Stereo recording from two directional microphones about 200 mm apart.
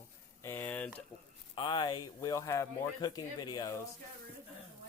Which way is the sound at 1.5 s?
25° left (ahead or behind).